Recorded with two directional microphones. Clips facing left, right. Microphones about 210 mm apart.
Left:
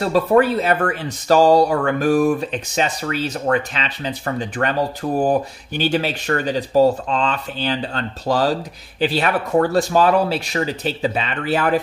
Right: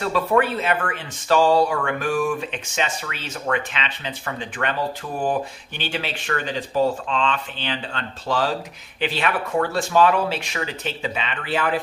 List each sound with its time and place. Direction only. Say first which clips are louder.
0.0 s speech: left 5 dB; 35° left (ahead or behind)